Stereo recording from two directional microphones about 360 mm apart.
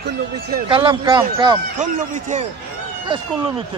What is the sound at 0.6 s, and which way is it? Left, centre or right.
Speech, centre.